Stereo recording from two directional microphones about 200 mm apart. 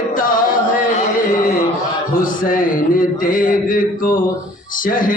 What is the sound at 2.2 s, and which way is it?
A man's voice, 45° left (ahead or behind).